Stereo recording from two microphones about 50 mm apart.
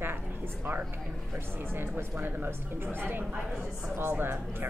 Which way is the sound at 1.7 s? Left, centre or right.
Right.